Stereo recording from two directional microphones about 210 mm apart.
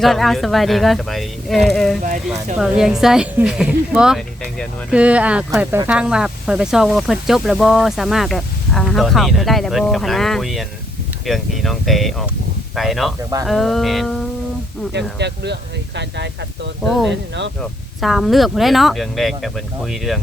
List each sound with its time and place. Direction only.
0.0 s speech: centre (ahead or behind)
14.9 s speech: 55° right (ahead or behind)
17.6 s speech: centre (ahead or behind)